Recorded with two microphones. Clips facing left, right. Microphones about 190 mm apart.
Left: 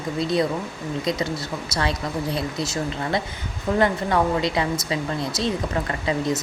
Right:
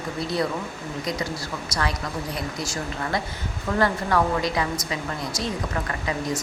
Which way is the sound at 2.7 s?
25° left (ahead or behind).